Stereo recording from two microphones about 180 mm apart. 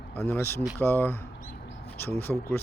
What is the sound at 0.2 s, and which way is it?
Speech, 15° left (ahead or behind).